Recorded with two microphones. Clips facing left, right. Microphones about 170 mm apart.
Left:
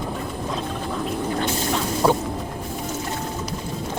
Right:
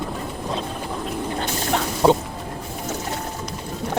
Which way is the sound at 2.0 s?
25° right (ahead or behind).